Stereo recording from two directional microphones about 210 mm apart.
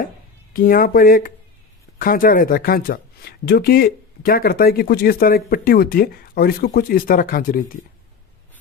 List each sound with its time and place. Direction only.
0.5 s speech: 45° left (ahead or behind)